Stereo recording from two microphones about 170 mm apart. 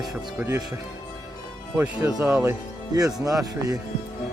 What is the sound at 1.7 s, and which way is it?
Speech, 10° right (ahead or behind).